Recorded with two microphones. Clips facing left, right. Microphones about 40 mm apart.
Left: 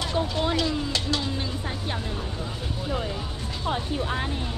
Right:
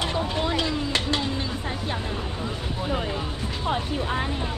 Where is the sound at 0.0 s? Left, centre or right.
Right.